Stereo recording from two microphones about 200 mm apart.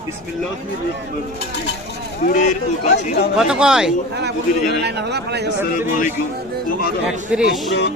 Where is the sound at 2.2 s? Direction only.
40° left (ahead or behind).